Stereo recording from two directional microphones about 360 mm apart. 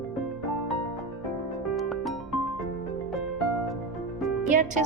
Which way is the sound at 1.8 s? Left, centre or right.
Centre.